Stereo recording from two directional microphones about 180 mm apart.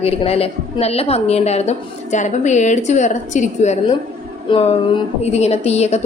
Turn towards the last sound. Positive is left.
turn(degrees=35)  # may be behind; listen again after turning